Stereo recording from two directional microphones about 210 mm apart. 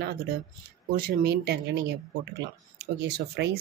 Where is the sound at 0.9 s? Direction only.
45° right (ahead or behind).